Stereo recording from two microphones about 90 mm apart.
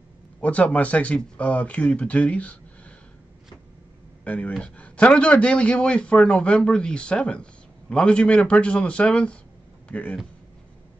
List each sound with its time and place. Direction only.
0.4 s a man's voice: 15° left (ahead or behind)
4.2 s a man's voice: 15° left (ahead or behind)